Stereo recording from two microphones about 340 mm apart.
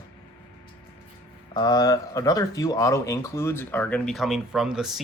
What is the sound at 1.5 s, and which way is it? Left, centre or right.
Speech, centre.